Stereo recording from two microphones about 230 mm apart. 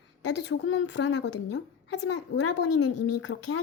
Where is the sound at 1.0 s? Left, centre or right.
Left.